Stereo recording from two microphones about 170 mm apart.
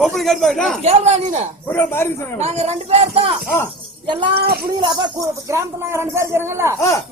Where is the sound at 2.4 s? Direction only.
40° right (ahead or behind).